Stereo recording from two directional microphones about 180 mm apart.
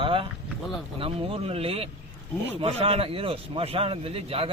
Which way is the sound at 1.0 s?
30° right (ahead or behind).